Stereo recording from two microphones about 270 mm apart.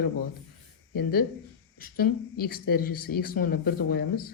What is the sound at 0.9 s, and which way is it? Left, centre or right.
Speech, left.